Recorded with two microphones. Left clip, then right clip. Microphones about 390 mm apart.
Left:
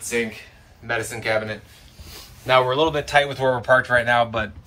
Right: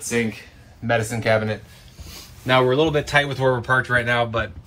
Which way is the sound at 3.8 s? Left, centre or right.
Centre.